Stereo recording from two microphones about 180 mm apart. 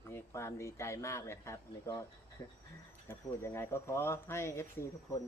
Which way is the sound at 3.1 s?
15° left (ahead or behind).